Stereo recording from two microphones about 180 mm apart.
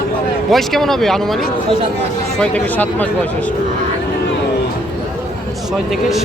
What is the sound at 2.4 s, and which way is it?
Speech, 10° left (ahead or behind).